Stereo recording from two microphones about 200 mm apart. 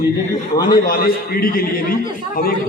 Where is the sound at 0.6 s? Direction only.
20° left (ahead or behind).